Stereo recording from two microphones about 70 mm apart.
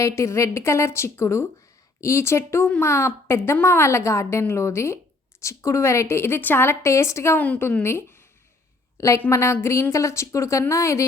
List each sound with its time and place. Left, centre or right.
0.0 s a woman's voice: left
7.3 s a woman's voice: centre
7.8 s speech: left
9.0 s a woman's voice: left